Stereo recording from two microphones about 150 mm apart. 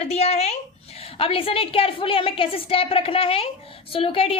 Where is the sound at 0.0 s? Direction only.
45° left (ahead or behind).